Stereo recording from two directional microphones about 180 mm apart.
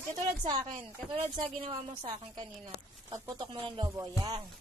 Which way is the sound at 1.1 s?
30° right (ahead or behind).